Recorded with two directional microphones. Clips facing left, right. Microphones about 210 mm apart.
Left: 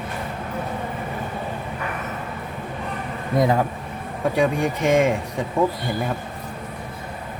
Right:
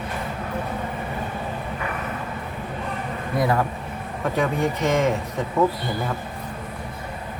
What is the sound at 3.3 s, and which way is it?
Speech, 20° left (ahead or behind).